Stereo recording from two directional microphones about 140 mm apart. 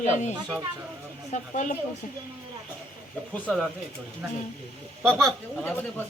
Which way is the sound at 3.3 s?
10° left (ahead or behind).